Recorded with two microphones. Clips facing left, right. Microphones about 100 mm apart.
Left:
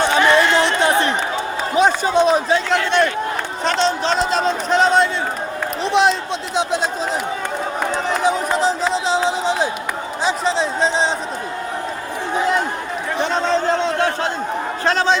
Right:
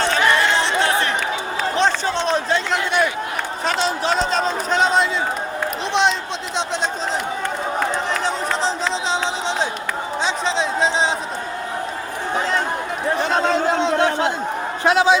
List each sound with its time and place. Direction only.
0.0 s chatter: 15° left (ahead or behind)
1.7 s a sound: 10° left (ahead or behind)
2.7 s a sound: 5° right (ahead or behind)
3.6 s speech: 5° right (ahead or behind)
8.2 s speech: 10° left (ahead or behind)
13.1 s a man's voice: 5° right (ahead or behind)